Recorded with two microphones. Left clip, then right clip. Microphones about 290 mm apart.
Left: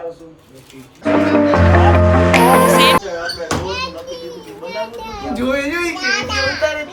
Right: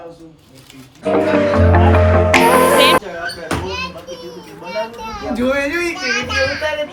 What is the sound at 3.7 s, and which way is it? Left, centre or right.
Children playing, left.